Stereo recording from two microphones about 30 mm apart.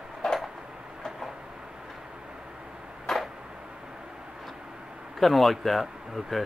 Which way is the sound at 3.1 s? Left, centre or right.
Left.